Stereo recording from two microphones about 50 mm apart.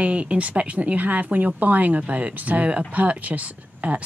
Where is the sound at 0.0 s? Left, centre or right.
Right.